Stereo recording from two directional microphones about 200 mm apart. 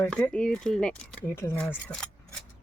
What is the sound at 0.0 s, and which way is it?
A woman's voice, 5° left (ahead or behind).